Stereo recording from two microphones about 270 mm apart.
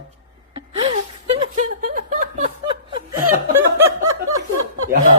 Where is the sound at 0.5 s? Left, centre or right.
Right.